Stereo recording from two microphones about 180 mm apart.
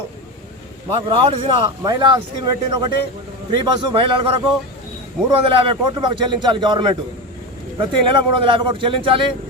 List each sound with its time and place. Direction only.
1.0 s a man's voice: 30° right (ahead or behind)